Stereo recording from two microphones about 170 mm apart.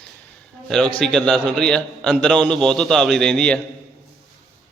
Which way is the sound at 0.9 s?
5° left (ahead or behind).